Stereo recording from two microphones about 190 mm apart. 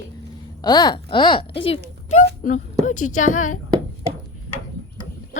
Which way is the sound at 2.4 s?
40° left (ahead or behind).